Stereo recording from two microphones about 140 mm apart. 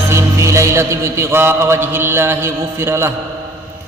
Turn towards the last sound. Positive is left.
turn(degrees=-20)  # may be behind; listen again after turning